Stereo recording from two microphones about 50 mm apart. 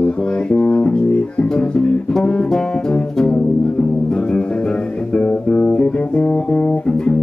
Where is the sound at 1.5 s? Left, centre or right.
Left.